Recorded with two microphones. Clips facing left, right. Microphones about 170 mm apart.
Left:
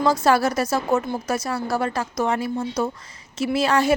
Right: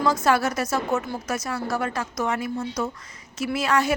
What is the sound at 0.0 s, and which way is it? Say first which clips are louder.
A woman's voice: left 3 dB; 30° left (ahead or behind).